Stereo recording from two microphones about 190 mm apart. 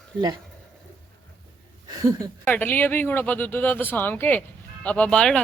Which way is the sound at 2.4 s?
10° left (ahead or behind).